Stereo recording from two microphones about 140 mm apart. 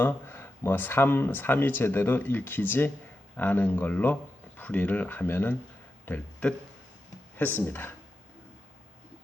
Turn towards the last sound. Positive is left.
turn(degrees=15)  # may be behind; listen again after turning